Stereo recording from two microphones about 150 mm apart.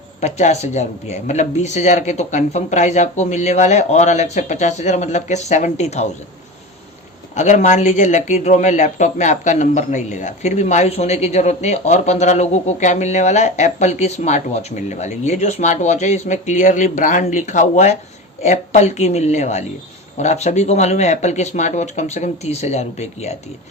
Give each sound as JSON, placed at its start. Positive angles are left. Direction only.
{"t": 0.2, "sound": "speech", "side_deg": 50}
{"t": 7.3, "sound": "speech", "side_deg": 50}